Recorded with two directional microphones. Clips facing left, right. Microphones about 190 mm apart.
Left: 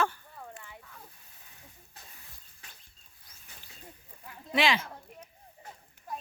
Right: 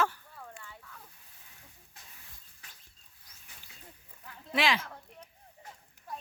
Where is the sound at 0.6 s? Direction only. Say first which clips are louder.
Left 1 dB; 15° left (ahead or behind).